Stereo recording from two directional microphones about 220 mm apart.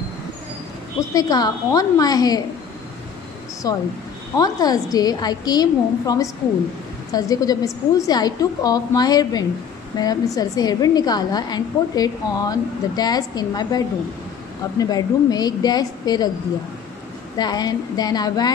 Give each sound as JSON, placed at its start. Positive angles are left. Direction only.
{"t": 1.1, "sound": "a woman's voice", "side_deg": 15}
{"t": 3.6, "sound": "a woman's voice", "side_deg": 15}
{"t": 17.4, "sound": "a woman's voice", "side_deg": 20}